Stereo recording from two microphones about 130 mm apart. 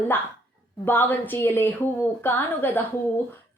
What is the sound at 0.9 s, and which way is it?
Speech, 15° left (ahead or behind).